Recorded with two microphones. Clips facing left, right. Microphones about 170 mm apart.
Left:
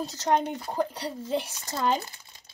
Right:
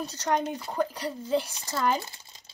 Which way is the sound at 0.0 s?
20° left (ahead or behind).